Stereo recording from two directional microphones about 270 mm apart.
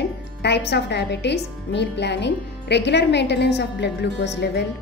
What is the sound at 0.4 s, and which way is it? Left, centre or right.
A woman's voice, left.